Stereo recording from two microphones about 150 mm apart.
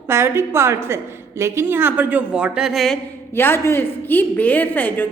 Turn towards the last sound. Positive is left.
turn(degrees=10)  # may be behind; listen again after turning